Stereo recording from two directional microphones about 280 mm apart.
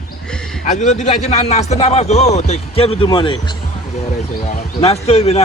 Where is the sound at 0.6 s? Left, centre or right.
Left.